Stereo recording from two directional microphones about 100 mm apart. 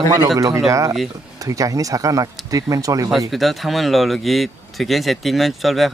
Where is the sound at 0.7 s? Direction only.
35° right (ahead or behind).